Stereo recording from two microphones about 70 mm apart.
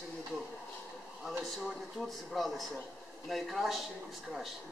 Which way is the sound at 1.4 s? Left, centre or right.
Centre.